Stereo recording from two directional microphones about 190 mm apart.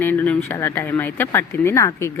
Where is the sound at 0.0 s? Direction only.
10° left (ahead or behind).